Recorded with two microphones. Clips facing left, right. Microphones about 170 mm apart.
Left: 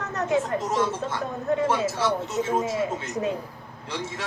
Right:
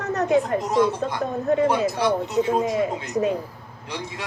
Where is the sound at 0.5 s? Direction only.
15° right (ahead or behind).